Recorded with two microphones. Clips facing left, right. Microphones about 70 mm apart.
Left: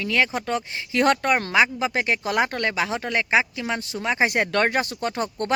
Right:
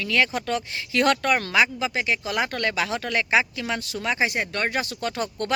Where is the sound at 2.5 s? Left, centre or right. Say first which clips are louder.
Left 1 dB; left.